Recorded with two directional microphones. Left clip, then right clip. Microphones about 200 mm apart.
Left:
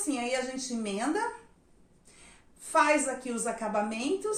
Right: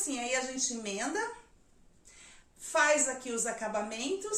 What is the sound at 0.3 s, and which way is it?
Speech, 20° right (ahead or behind).